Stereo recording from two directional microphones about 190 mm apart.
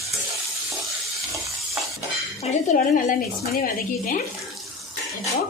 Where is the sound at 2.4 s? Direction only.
35° left (ahead or behind).